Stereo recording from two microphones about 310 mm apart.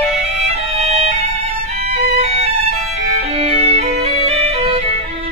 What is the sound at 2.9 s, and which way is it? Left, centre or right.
Music, centre.